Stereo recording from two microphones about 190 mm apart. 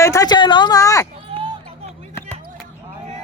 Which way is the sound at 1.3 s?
30° right (ahead or behind).